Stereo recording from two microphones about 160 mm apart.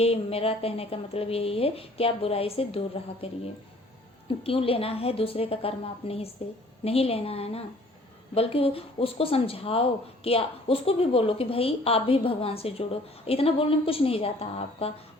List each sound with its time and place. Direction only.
0.0 s a woman's voice: 40° left (ahead or behind)
4.4 s a woman's voice: 35° left (ahead or behind)